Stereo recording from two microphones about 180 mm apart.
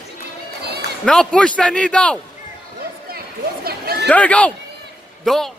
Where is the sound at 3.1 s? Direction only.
60° right (ahead or behind).